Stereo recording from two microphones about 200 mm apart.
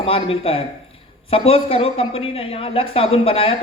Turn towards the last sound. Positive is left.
turn(degrees=30)  # may be behind; listen again after turning